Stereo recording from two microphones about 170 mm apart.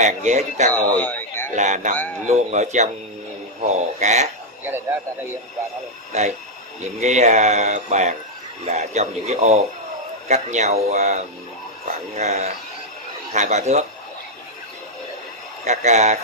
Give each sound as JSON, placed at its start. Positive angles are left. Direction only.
{"t": 0.0, "sound": "speech", "side_deg": -45}
{"t": 0.9, "sound": "a sound", "side_deg": 10}
{"t": 1.5, "sound": "speech", "side_deg": -45}
{"t": 6.1, "sound": "speech", "side_deg": -40}
{"t": 15.6, "sound": "speech", "side_deg": -45}